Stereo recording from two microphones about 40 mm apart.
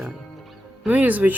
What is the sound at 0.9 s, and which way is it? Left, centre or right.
Speech, right.